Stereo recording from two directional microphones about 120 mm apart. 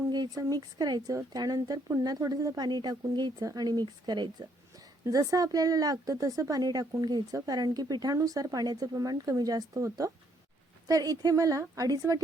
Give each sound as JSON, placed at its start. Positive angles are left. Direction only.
{"t": 0.1, "sound": "a woman's voice", "side_deg": -35}